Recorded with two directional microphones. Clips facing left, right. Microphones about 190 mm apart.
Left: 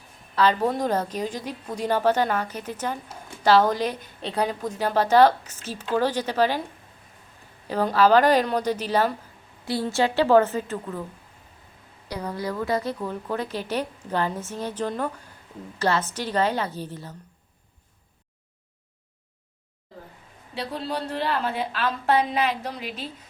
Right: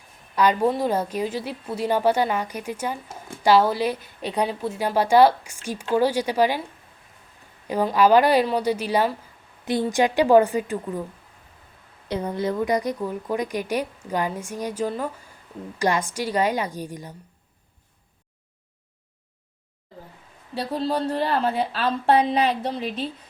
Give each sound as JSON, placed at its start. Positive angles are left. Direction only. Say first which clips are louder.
{"t": 0.3, "sound": "a woman's voice", "louder": "right 2 dB", "side_deg": -15}
{"t": 7.7, "sound": "a woman's voice", "louder": "right 1 dB", "side_deg": -15}
{"t": 12.0, "sound": "a woman's voice", "louder": "right 5 dB", "side_deg": -25}
{"t": 20.6, "sound": "a woman's voice", "louder": "right 5 dB", "side_deg": -35}